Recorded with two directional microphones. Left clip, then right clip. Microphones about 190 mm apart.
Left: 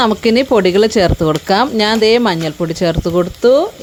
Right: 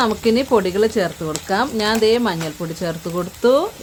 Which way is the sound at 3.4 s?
20° left (ahead or behind).